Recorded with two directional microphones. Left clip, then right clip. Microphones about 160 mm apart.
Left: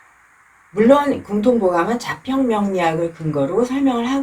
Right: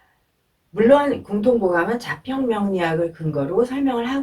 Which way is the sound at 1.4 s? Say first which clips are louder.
Left 2 dB; 15° left (ahead or behind).